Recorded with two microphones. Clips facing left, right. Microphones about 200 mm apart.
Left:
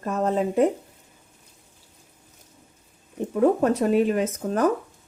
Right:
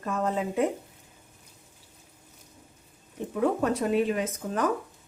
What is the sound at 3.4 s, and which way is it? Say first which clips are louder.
Speech: left 6 dB; 40° left (ahead or behind).